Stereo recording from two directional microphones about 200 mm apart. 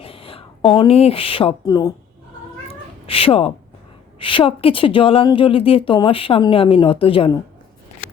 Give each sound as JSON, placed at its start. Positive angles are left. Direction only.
{"t": 0.0, "sound": "speech", "side_deg": 25}
{"t": 3.1, "sound": "a woman's voice", "side_deg": 30}